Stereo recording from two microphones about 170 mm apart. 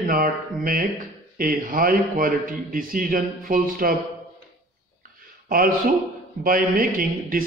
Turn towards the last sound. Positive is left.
turn(degrees=-60)  # may be behind; listen again after turning